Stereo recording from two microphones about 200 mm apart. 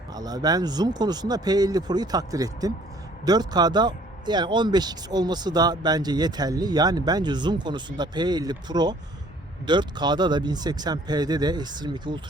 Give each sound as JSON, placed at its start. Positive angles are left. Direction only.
{"t": 0.1, "sound": "speech", "side_deg": -20}